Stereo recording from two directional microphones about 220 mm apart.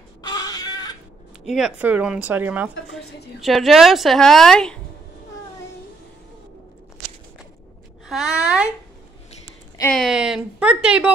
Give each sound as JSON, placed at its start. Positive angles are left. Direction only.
{"t": 0.2, "sound": "a sound", "side_deg": 20}
{"t": 1.4, "sound": "a woman's voice", "side_deg": 0}
{"t": 8.1, "sound": "a woman's voice", "side_deg": -5}
{"t": 9.8, "sound": "a woman's voice", "side_deg": 5}